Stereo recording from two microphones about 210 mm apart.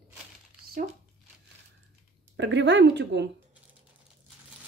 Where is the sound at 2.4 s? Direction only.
60° right (ahead or behind).